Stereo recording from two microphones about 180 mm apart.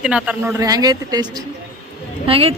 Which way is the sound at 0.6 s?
20° right (ahead or behind).